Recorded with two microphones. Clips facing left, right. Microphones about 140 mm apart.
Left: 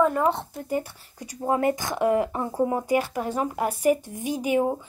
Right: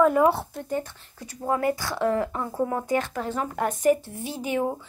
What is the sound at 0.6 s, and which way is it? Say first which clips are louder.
Speech: left 1 dB; 10° left (ahead or behind).